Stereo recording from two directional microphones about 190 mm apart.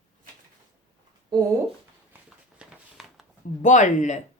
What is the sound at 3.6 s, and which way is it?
Speech, 40° left (ahead or behind).